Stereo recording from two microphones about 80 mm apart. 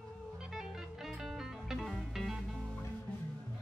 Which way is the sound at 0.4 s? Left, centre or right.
Centre.